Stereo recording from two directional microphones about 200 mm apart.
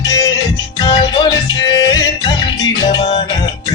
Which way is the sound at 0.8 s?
20° left (ahead or behind).